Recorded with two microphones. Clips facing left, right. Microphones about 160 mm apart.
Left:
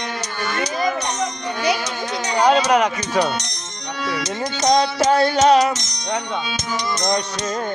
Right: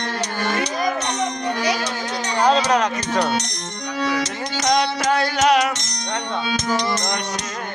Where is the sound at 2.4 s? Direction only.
10° left (ahead or behind).